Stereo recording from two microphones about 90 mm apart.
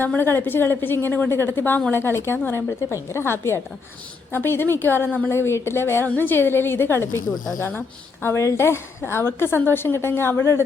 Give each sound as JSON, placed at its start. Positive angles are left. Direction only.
{"t": 0.0, "sound": "a woman's voice", "side_deg": 25}